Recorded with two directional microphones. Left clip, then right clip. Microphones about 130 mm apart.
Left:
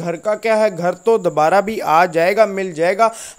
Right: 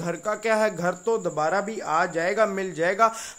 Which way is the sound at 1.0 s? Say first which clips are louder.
Left 12 dB; 55° left (ahead or behind).